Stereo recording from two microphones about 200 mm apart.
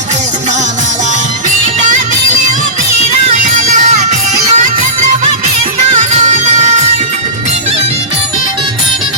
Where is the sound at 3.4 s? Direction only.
35° right (ahead or behind).